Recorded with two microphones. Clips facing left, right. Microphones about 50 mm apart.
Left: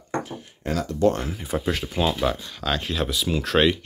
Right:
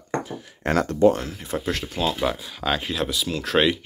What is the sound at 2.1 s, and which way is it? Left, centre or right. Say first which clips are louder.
Speech: even; centre.